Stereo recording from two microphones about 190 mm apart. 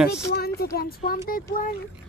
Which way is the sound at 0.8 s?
50° left (ahead or behind).